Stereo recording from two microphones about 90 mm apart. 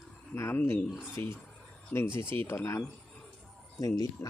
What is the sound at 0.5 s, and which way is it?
Speech, 20° left (ahead or behind).